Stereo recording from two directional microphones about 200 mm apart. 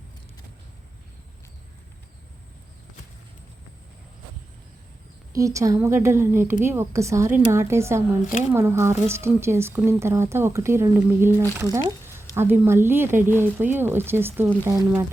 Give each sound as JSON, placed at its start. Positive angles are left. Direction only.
{"t": 5.3, "sound": "speech", "side_deg": -15}